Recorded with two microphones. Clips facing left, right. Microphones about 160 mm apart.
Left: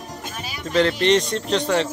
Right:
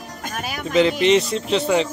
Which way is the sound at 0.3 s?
55° right (ahead or behind).